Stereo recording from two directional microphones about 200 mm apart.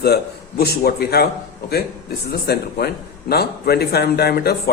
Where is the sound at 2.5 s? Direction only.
55° left (ahead or behind).